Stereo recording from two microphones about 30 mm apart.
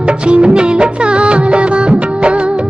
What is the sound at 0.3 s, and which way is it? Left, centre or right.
Music of bollywood, right.